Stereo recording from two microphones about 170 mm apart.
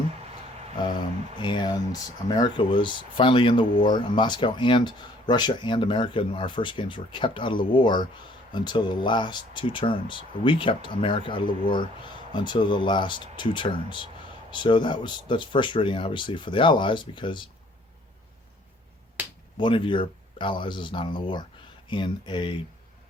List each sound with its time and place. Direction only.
1.4 s speech: 25° left (ahead or behind)
19.5 s speech: 30° left (ahead or behind)